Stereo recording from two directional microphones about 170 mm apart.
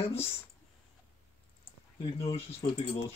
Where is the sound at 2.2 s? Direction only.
35° left (ahead or behind).